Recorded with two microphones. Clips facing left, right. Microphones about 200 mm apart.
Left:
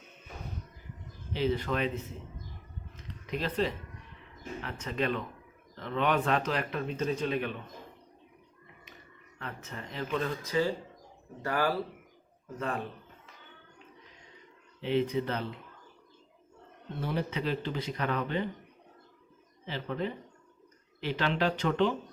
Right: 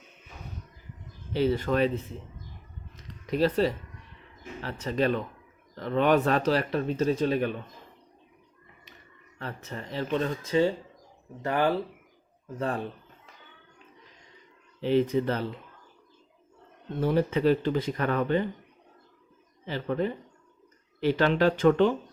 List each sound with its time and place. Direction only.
1.3 s speech: 45° right (ahead or behind)
3.2 s a man's voice: 40° right (ahead or behind)
9.4 s speech: 35° right (ahead or behind)
12.5 s a man's voice: 30° right (ahead or behind)
14.8 s speech: 40° right (ahead or behind)
17.0 s speech: 45° right (ahead or behind)
19.6 s speech: 45° right (ahead or behind)